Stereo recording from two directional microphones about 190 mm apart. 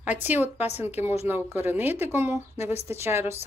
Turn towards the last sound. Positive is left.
turn(degrees=-10)  # may be behind; listen again after turning